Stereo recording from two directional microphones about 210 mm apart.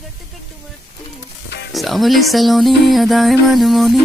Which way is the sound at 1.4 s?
50° left (ahead or behind).